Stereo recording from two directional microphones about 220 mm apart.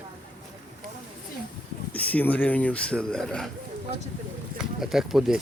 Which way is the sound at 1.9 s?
5° left (ahead or behind).